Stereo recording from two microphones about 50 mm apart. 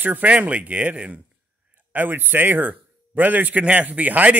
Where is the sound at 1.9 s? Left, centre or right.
Right.